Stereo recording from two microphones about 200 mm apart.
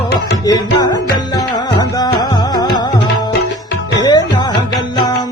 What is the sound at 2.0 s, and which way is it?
Music, 20° left (ahead or behind).